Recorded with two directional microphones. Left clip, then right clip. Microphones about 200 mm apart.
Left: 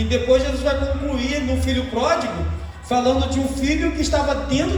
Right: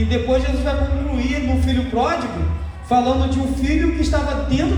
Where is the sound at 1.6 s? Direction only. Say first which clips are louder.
Right 1 dB; 30° left (ahead or behind).